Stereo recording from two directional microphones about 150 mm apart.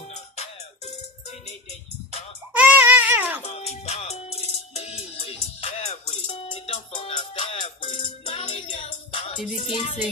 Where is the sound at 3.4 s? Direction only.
45° left (ahead or behind).